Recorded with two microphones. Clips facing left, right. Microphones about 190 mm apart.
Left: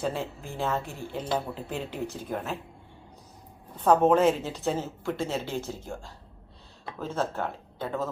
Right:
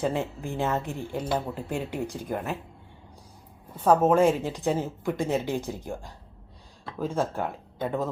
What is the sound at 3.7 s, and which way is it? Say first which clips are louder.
Speech: even; 10° right (ahead or behind).